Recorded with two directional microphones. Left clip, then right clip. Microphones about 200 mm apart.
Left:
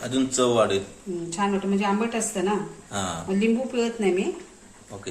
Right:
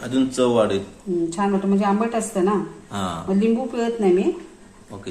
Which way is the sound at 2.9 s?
5° left (ahead or behind).